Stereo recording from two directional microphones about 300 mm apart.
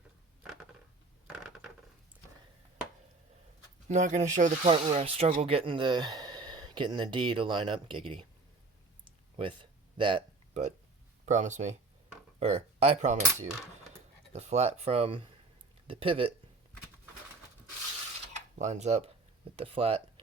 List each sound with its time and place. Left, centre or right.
3.8 s speech: right
10.0 s speech: centre
18.5 s speech: right